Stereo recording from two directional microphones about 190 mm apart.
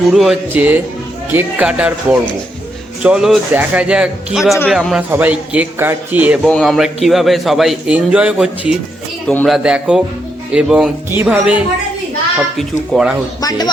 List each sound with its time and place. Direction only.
0.1 s a man's voice: centre (ahead or behind)
9.2 s a man's voice: 5° left (ahead or behind)
9.6 s a man's voice: 5° right (ahead or behind)
13.4 s speech: 20° left (ahead or behind)